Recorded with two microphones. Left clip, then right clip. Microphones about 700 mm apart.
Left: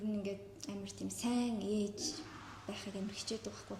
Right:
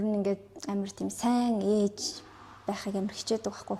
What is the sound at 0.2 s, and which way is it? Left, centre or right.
A woman's voice, right.